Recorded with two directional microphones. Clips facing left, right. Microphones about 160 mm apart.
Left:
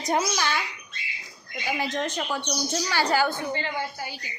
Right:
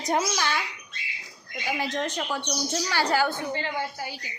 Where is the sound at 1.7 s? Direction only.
10° left (ahead or behind).